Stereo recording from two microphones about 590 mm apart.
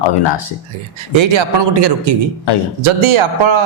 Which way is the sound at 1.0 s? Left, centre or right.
Right.